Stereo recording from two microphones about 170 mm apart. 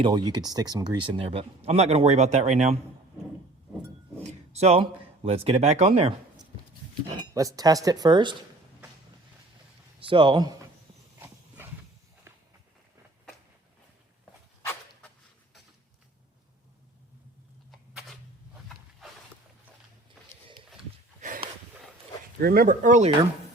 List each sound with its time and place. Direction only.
0.0 s speech: 25° right (ahead or behind); by 2.7 s 40° right (ahead or behind)
4.5 s speech: 40° right (ahead or behind)
7.3 s speech: 20° right (ahead or behind)
10.0 s speech: 30° right (ahead or behind)
11.2 s horse: 10° right (ahead or behind)
19.0 s a sound: centre (ahead or behind)
21.2 s a sound: 50° right (ahead or behind)
22.4 s speech: 60° right (ahead or behind); by 23.1 s 45° right (ahead or behind)